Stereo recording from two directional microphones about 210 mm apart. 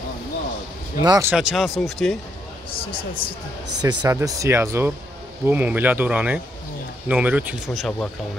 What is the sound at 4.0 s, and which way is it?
Speech, 15° right (ahead or behind).